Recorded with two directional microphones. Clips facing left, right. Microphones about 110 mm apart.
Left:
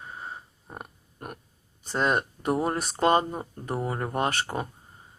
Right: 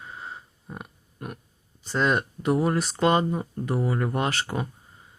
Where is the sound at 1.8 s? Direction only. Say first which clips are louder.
Right 1 dB; 45° left (ahead or behind).